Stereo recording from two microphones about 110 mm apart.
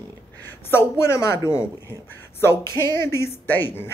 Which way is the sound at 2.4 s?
25° left (ahead or behind).